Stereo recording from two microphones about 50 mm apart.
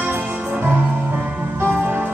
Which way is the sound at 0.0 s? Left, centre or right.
Right.